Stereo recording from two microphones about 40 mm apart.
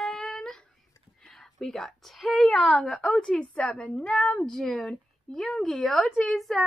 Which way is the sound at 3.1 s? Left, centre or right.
Centre.